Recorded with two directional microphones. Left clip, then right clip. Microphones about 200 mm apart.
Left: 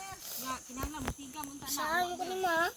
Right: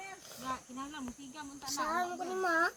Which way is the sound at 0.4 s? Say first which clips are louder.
Even; 10° right (ahead or behind).